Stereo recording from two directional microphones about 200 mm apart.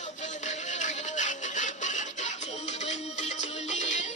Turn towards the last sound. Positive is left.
turn(degrees=35)  # may be behind; listen again after turning